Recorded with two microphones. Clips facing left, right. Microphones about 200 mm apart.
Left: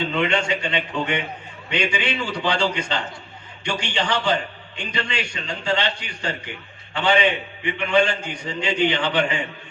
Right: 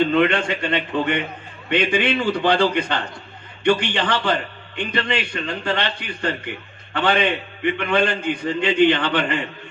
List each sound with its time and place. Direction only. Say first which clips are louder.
0.0 s a man's voice: right 5 dB; 55° right (ahead or behind)